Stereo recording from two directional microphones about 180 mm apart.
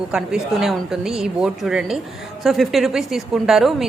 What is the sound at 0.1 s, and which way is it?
A woman's voice, 5° right (ahead or behind).